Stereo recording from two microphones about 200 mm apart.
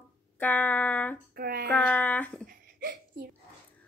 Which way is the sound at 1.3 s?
50° right (ahead or behind).